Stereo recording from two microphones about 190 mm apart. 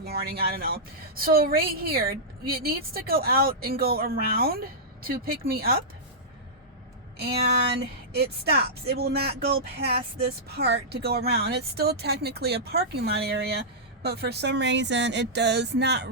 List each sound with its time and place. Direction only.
0.0 s a woman's voice: 55° right (ahead or behind)
7.7 s speech: 55° right (ahead or behind)